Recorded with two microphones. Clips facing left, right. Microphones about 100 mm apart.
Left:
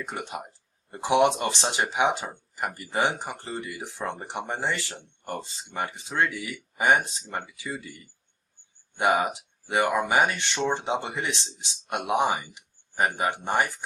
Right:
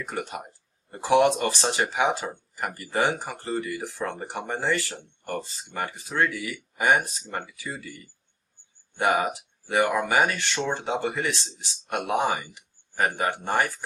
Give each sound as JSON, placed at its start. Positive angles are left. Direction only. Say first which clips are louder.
{"t": 0.0, "sound": "speech", "louder": "right 1 dB", "side_deg": 20}
{"t": 9.6, "sound": "speech", "louder": "right 1 dB", "side_deg": 20}